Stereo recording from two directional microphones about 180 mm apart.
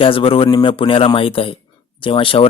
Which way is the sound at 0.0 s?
30° left (ahead or behind).